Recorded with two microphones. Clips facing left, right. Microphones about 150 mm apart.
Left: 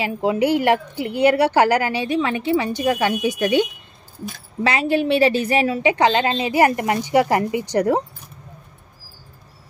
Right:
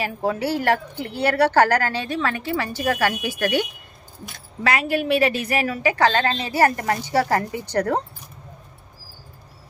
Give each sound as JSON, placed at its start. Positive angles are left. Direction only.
{"t": 0.0, "sound": "a woman's voice", "side_deg": 15}
{"t": 4.6, "sound": "a woman's voice", "side_deg": 25}